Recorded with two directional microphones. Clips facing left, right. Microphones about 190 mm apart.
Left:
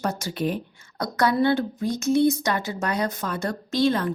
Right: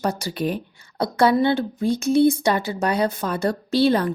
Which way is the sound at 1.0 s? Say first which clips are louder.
Right 4 dB; 25° right (ahead or behind).